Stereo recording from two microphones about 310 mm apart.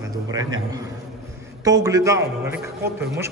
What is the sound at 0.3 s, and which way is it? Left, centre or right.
A man's voice, centre.